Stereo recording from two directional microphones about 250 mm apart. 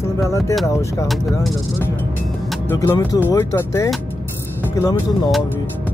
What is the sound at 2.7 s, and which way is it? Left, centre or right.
Speech, centre.